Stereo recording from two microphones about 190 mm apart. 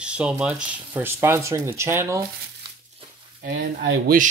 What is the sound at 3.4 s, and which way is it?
Speech, 55° right (ahead or behind).